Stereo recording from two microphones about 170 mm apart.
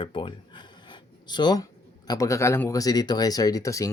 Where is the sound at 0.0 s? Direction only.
30° left (ahead or behind).